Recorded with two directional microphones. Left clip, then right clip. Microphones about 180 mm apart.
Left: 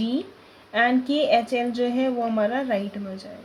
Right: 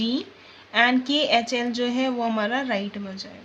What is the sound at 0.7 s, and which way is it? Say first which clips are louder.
A woman's voice: right 1 dB; 25° right (ahead or behind).